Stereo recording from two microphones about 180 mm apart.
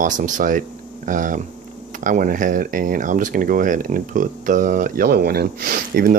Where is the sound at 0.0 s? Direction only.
45° right (ahead or behind).